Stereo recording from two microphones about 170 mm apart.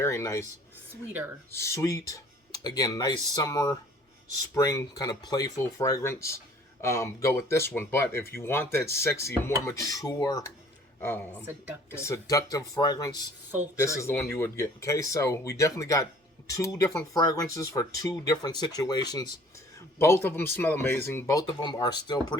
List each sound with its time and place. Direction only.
0.0 s speech: 15° left (ahead or behind)
1.5 s speech: 15° left (ahead or behind)
11.4 s speech: 10° right (ahead or behind)
11.9 s speech: 15° left (ahead or behind)